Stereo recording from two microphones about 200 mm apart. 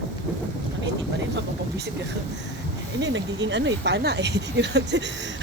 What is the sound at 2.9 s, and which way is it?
Speech, 65° right (ahead or behind).